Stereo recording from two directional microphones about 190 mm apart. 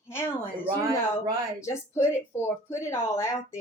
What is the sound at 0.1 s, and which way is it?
A woman's voice, 15° left (ahead or behind).